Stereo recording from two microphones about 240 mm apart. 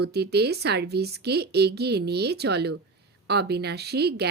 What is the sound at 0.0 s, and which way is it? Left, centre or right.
Speech, right.